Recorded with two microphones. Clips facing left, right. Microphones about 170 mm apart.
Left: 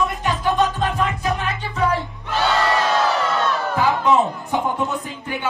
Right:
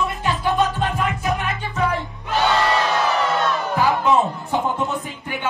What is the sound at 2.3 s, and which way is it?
Crowd, 20° right (ahead or behind).